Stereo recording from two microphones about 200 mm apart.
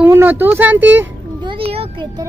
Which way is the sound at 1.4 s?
25° right (ahead or behind).